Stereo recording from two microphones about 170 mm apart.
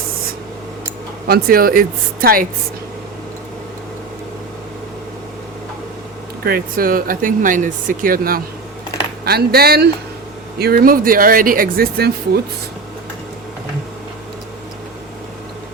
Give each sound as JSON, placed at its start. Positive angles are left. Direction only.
{"t": 1.3, "sound": "speech", "side_deg": -60}
{"t": 6.4, "sound": "speech", "side_deg": -60}